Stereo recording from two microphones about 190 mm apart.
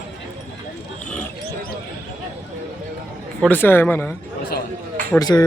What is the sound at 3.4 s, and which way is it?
Speech, 10° left (ahead or behind).